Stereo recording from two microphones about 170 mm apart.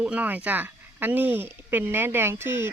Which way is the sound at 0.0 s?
10° right (ahead or behind).